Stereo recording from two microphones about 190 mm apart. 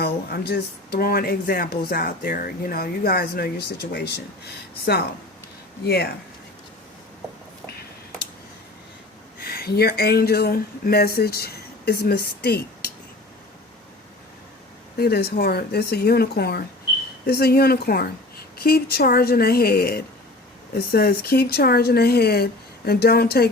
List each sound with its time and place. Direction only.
0.0 s speech: 55° left (ahead or behind)
5.8 s speech: 55° left (ahead or behind)
9.4 s speech: 55° left (ahead or behind)
14.9 s speech: 55° left (ahead or behind)